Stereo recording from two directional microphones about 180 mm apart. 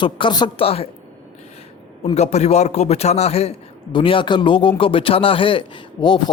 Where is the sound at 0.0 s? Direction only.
25° left (ahead or behind).